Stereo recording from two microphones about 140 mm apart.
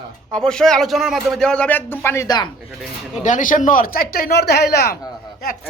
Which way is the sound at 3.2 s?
70° left (ahead or behind).